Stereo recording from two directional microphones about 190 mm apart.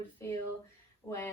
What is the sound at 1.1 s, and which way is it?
Speech, 10° left (ahead or behind).